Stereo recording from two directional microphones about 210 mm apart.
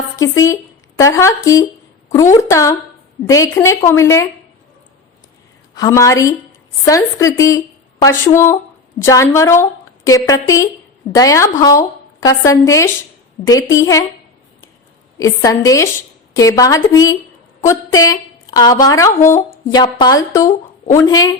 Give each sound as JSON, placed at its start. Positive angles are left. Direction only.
{"t": 0.2, "sound": "a woman's voice", "side_deg": 15}
{"t": 5.7, "sound": "a woman's voice", "side_deg": 15}
{"t": 15.2, "sound": "a woman's voice", "side_deg": 15}